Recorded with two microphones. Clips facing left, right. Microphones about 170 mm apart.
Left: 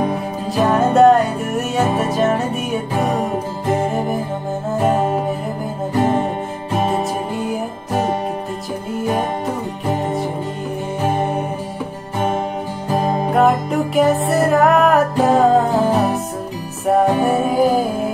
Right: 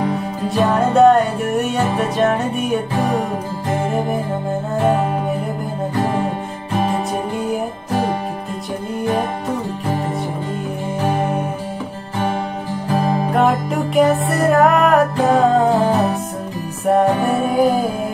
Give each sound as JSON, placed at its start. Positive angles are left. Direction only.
{"t": 0.6, "sound": "music", "side_deg": 0}
{"t": 5.9, "sound": "music", "side_deg": 20}
{"t": 12.9, "sound": "music", "side_deg": 20}
{"t": 13.3, "sound": "music", "side_deg": 0}
{"t": 17.4, "sound": "music", "side_deg": 0}